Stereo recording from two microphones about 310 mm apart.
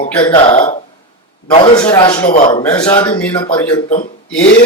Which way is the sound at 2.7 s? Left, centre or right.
Centre.